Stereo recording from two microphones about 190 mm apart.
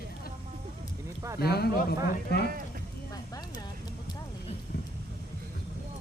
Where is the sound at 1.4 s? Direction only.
55° left (ahead or behind).